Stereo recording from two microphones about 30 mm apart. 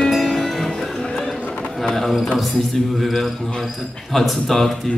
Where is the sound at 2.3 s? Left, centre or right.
Centre.